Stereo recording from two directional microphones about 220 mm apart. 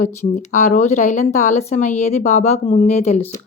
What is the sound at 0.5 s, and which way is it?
Speech, 30° left (ahead or behind).